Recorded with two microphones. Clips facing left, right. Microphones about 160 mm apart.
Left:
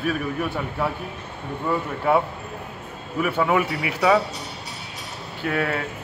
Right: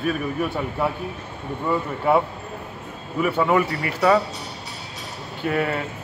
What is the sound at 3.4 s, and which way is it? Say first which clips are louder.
Speech: right 1 dB; 5° left (ahead or behind).